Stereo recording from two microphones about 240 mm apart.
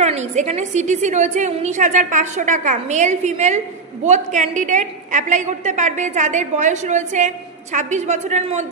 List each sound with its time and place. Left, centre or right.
0.0 s a woman's voice: right